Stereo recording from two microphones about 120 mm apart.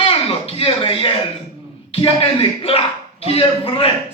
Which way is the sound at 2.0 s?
50° left (ahead or behind).